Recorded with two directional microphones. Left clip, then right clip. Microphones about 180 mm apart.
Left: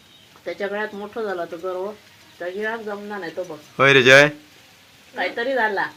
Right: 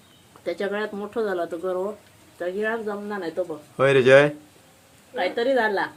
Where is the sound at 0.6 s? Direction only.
30° right (ahead or behind).